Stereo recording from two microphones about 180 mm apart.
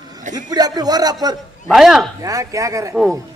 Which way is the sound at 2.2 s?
20° right (ahead or behind).